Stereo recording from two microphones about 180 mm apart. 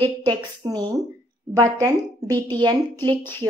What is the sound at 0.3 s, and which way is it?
A woman's voice, 25° right (ahead or behind).